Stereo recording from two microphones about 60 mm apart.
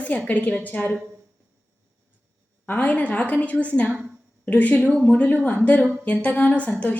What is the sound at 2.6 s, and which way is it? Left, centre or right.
A woman's voice, left.